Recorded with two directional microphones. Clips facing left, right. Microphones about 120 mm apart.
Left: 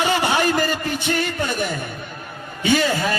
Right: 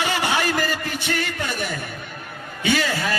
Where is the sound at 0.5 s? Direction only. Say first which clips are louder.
Left 3 dB; 25° left (ahead or behind).